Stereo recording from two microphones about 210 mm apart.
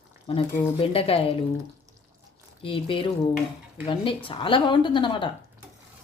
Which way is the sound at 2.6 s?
25° left (ahead or behind).